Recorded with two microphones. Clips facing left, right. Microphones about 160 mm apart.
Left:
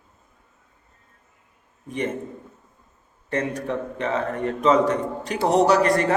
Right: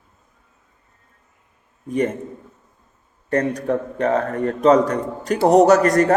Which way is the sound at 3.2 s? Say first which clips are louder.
Right 6 dB; 40° right (ahead or behind).